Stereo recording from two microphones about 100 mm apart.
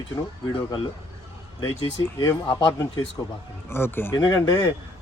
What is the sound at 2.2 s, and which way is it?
Speech, 50° left (ahead or behind).